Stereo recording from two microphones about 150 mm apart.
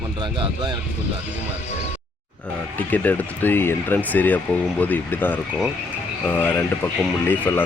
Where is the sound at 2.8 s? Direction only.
10° left (ahead or behind).